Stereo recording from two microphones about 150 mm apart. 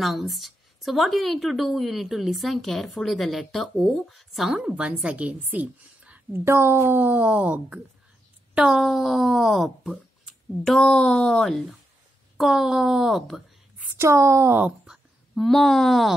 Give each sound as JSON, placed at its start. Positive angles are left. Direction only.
{"t": 0.0, "sound": "a woman's voice", "side_deg": 0}
{"t": 13.9, "sound": "speech", "side_deg": -20}
{"t": 14.9, "sound": "speech", "side_deg": 0}